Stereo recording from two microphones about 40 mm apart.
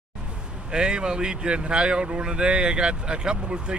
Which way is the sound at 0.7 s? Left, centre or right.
Right.